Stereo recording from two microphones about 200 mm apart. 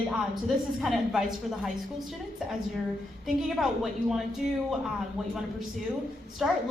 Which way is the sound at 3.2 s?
Centre (ahead or behind).